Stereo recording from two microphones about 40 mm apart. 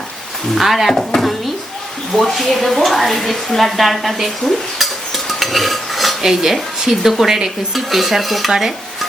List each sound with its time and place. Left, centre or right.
0.5 s dishes: centre
2.3 s a woman's voice: centre
7.7 s dishes: centre